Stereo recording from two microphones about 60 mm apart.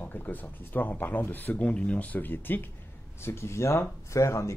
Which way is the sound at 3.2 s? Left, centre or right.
Left.